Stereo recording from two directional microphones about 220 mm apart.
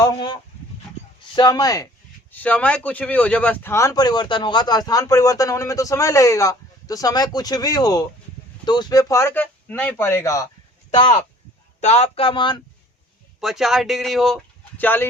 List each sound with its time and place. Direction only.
0.0 s speech: 20° left (ahead or behind)
1.4 s speech: 20° left (ahead or behind)
11.8 s speech: 30° left (ahead or behind)
13.4 s speech: centre (ahead or behind)